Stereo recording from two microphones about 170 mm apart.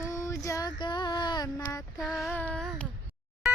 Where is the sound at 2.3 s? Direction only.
10° left (ahead or behind).